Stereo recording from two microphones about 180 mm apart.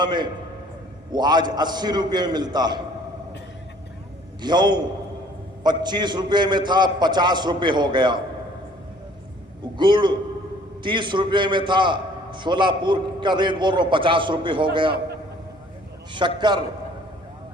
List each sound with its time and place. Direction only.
0.0 s a man's voice: 25° right (ahead or behind)
4.4 s a man's voice: 25° right (ahead or behind)
9.7 s a man's voice: 25° right (ahead or behind)
16.1 s a man's voice: 25° right (ahead or behind)